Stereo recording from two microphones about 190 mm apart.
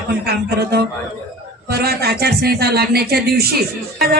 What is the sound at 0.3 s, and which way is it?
A woman's voice, 55° right (ahead or behind).